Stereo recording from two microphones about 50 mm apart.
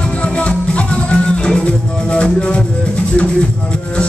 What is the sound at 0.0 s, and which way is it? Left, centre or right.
Music, left.